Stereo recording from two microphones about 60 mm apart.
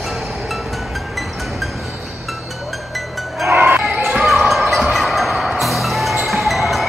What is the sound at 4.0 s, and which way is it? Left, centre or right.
Basketball bounce, centre.